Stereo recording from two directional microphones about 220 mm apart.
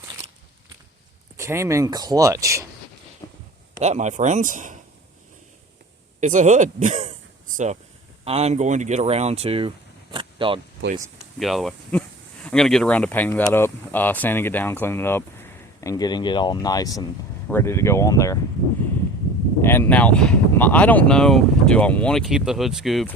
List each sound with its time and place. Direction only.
1.4 s speech: 10° right (ahead or behind)
3.2 s a sound: 15° left (ahead or behind)
3.8 s a man's voice: 30° right (ahead or behind)
6.1 s a man's voice: 35° right (ahead or behind)
11.3 s speech: centre (ahead or behind)
19.6 s speech: 10° left (ahead or behind)